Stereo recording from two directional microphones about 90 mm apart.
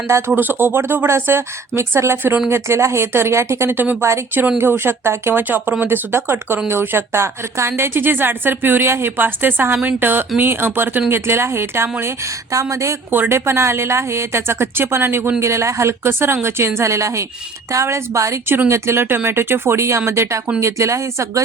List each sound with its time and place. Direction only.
0.3 s a woman's voice: 20° right (ahead or behind)